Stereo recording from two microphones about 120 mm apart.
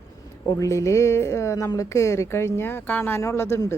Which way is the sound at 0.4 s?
30° left (ahead or behind).